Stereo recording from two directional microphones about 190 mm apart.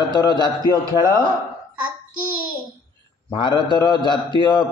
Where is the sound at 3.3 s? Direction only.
25° left (ahead or behind).